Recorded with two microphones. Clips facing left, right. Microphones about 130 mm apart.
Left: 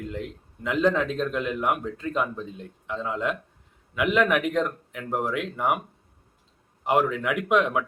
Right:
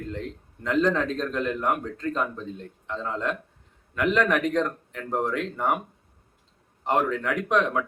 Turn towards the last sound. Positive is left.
turn(degrees=5)  # may be behind; listen again after turning